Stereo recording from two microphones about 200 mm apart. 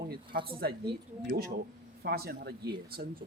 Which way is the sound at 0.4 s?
50° right (ahead or behind).